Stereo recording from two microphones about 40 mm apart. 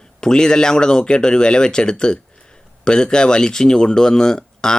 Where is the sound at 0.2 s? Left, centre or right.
Centre.